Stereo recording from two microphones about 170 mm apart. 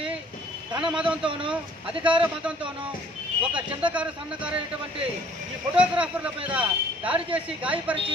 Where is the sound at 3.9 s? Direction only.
5° right (ahead or behind).